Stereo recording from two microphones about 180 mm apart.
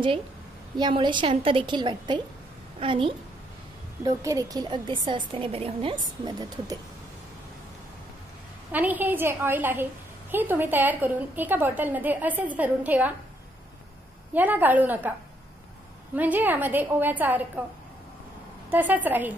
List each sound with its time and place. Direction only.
0.7 s a woman's voice: 25° right (ahead or behind)
4.0 s a woman's voice: 20° right (ahead or behind)
8.7 s a woman's voice: 10° right (ahead or behind)
14.3 s a woman's voice: 10° right (ahead or behind)
16.2 s a woman's voice: 10° right (ahead or behind)
18.7 s a woman's voice: 10° right (ahead or behind)